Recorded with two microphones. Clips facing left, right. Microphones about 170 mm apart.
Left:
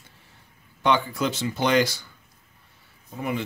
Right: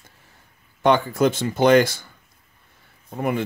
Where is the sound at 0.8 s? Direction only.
45° right (ahead or behind).